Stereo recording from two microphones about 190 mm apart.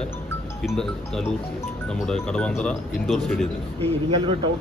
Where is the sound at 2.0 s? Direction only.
5° left (ahead or behind).